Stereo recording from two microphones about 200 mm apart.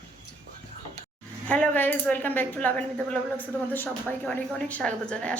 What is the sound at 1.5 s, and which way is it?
Speech, 10° left (ahead or behind).